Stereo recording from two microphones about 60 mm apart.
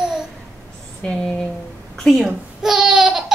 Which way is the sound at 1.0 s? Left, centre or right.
Centre.